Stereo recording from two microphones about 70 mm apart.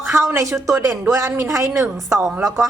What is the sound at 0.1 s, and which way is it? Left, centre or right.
A woman's voice, right.